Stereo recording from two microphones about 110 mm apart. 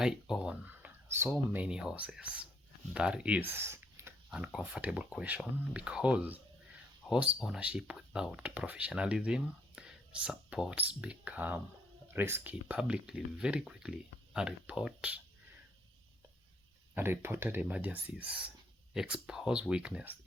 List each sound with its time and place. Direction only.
0.0 s speech: 5° right (ahead or behind); by 1.3 s 20° right (ahead or behind)
1.3 s speech: 10° right (ahead or behind)
4.3 s speech: 5° right (ahead or behind)
16.9 s speech: 20° right (ahead or behind)